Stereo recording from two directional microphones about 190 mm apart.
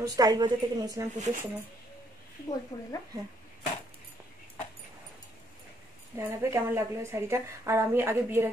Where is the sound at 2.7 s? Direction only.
25° left (ahead or behind).